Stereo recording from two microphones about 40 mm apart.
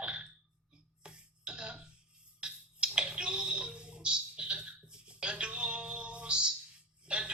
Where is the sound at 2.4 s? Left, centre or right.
Right.